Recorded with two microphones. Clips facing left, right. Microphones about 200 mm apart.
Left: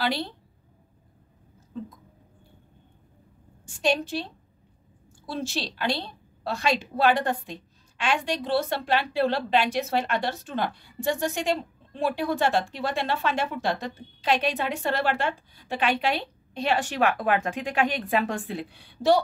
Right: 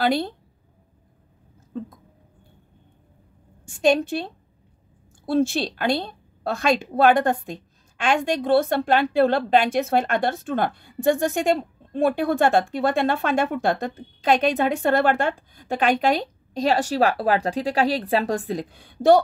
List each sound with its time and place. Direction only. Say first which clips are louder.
0.0 s a woman's voice: right 6 dB; 50° right (ahead or behind)
3.6 s a woman's voice: right 6 dB; 50° right (ahead or behind)